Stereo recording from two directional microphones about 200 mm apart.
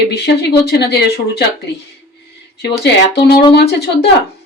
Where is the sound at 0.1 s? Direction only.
55° left (ahead or behind).